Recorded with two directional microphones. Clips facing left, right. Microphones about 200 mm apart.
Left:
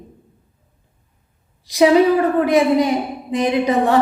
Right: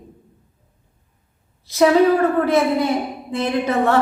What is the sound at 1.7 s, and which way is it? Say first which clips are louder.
A woman's voice: left 1 dB; 15° left (ahead or behind).